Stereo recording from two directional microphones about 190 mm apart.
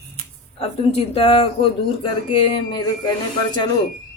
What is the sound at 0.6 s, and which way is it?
Speech, 30° left (ahead or behind).